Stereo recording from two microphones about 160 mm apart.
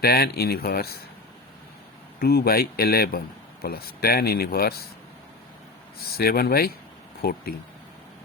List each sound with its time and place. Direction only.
0.0 s a man's voice: 75° left (ahead or behind)
2.1 s a man's voice: 80° left
6.0 s a man's voice: 75° left (ahead or behind)